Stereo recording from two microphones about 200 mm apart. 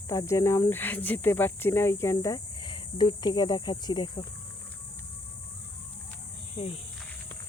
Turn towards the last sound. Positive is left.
turn(degrees=25)  # may be behind; listen again after turning